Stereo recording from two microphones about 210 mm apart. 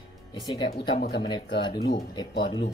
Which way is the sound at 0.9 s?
45° left (ahead or behind).